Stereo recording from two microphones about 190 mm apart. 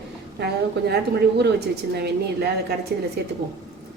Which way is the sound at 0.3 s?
60° right (ahead or behind).